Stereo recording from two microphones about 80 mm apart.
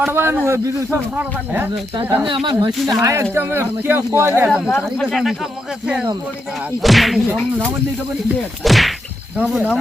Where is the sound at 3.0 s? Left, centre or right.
Right.